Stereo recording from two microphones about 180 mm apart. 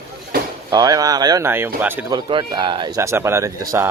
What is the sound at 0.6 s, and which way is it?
Speech, 20° right (ahead or behind).